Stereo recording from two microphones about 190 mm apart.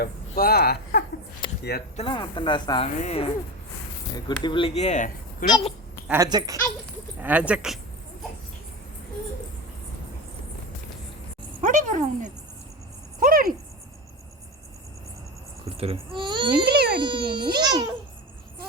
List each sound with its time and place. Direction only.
0.0 s speech: 55° left (ahead or behind)
1.4 s a sound: 25° left (ahead or behind)
2.0 s speech: 25° left (ahead or behind)
4.3 s speech: 25° left (ahead or behind); by 5.5 s 40° left (ahead or behind)
6.1 s speech: 20° right (ahead or behind)
7.2 s speech: 10° right (ahead or behind)
11.6 s speech: 40° right (ahead or behind)
13.1 s a sound: 45° right (ahead or behind)
15.6 s speech: 30° right (ahead or behind)
16.6 s baby cry: 55° right (ahead or behind)
17.0 s a child's voice: 25° right (ahead or behind)